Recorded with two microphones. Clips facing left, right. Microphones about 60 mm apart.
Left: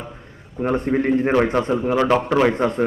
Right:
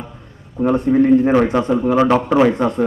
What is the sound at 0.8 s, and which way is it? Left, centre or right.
Speech, left.